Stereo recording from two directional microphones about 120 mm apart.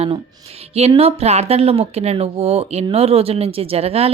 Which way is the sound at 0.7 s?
60° right (ahead or behind).